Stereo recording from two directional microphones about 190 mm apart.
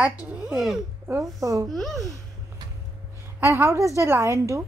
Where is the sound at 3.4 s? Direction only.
15° right (ahead or behind).